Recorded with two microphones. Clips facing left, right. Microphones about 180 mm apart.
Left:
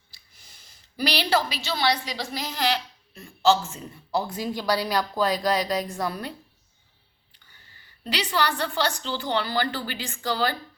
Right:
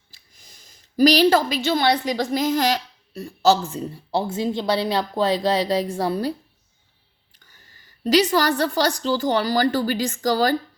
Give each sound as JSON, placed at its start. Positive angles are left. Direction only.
{"t": 0.6, "sound": "a woman's voice", "side_deg": -45}
{"t": 7.3, "sound": "a woman's voice", "side_deg": -40}